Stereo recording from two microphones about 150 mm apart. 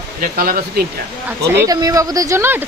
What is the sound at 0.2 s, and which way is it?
Speech, 75° right (ahead or behind).